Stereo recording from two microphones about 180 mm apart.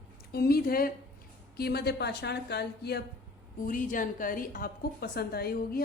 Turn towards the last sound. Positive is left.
turn(degrees=60)  # may be behind; listen again after turning